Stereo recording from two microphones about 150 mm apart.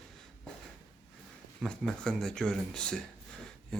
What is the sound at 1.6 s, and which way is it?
Speech, 5° left (ahead or behind).